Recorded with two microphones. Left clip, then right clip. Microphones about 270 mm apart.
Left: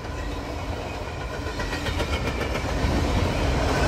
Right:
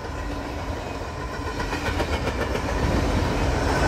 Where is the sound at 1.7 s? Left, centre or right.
Right.